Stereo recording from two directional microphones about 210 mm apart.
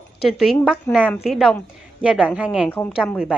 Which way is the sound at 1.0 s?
5° left (ahead or behind).